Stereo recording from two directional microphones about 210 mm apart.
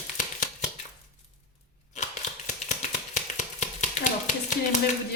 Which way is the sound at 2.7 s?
35° left (ahead or behind).